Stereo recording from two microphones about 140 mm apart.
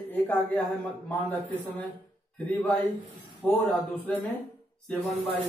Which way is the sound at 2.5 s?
10° left (ahead or behind).